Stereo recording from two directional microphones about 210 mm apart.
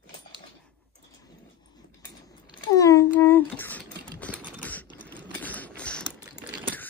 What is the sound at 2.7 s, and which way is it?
Typing, 15° left (ahead or behind).